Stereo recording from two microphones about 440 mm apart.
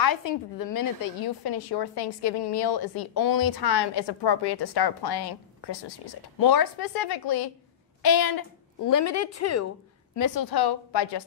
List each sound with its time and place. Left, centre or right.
0.0 s a woman's voice: left
10.1 s a woman's voice: left